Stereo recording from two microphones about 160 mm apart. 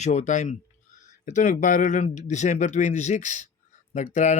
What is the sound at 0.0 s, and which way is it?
Speech, 50° left (ahead or behind).